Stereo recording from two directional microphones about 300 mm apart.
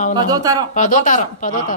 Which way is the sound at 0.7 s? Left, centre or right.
Left.